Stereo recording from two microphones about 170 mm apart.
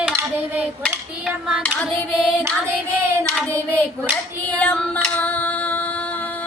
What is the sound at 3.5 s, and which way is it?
Child singing, 15° right (ahead or behind).